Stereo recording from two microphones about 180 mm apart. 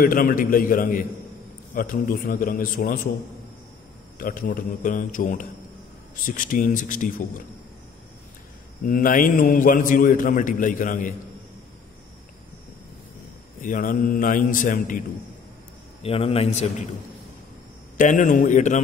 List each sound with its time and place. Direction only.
0.0 s a man's voice: 50° left (ahead or behind)
4.2 s a man's voice: 50° left (ahead or behind)
8.8 s a man's voice: 50° left (ahead or behind)
13.6 s a man's voice: 50° left (ahead or behind)
16.0 s speech: 30° left (ahead or behind)
17.9 s a man's voice: 45° left (ahead or behind)